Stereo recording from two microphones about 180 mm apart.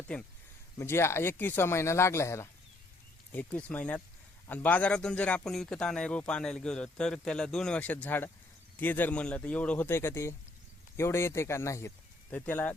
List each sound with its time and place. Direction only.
0.1 s speech: 5° left (ahead or behind)